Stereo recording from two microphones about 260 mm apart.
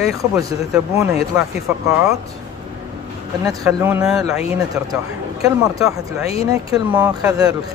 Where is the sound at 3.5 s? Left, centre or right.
Centre.